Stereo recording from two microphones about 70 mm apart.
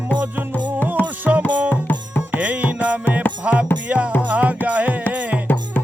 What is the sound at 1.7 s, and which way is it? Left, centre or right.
Music, left.